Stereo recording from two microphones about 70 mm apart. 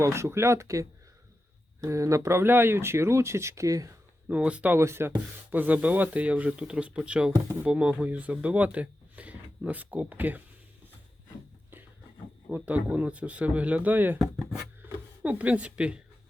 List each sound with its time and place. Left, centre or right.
0.0 s speech: right
4.3 s speech: centre
4.7 s speech: right
5.5 s speech: right
12.5 s speech: right
15.2 s speech: right